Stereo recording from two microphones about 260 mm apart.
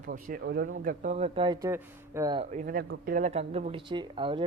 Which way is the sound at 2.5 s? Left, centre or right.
Right.